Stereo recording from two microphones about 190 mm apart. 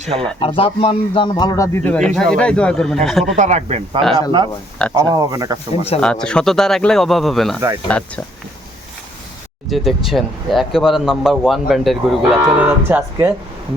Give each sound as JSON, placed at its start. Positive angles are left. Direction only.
{"t": 0.0, "sound": "speech", "side_deg": -30}
{"t": 0.3, "sound": "speech", "side_deg": 30}
{"t": 3.3, "sound": "speech", "side_deg": -40}
{"t": 4.9, "sound": "speech", "side_deg": -20}
{"t": 6.0, "sound": "speech", "side_deg": 5}
{"t": 9.6, "sound": "speech", "side_deg": 0}